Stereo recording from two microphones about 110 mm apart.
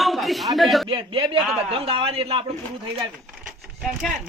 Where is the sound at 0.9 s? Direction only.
50° right (ahead or behind).